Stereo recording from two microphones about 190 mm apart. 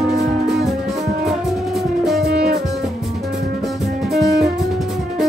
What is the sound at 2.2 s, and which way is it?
Music, 60° right (ahead or behind).